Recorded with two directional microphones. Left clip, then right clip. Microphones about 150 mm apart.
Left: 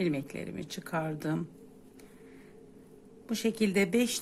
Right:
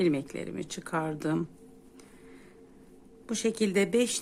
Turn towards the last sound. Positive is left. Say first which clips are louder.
# right 2 dB
turn(degrees=-10)  # may be behind; listen again after turning